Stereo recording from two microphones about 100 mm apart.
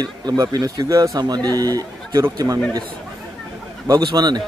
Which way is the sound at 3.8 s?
40° right (ahead or behind).